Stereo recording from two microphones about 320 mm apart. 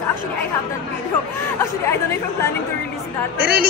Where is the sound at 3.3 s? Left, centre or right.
Right.